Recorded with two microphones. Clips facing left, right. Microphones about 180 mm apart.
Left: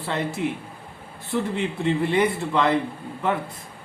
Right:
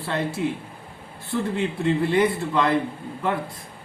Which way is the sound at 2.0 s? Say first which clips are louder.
Right 1 dB; 20° left (ahead or behind).